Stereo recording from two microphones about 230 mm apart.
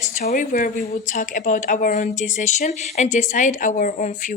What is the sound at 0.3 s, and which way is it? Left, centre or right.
A woman's voice, left.